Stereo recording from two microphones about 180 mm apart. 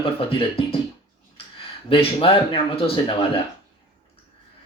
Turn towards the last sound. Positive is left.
turn(degrees=30)  # may be behind; listen again after turning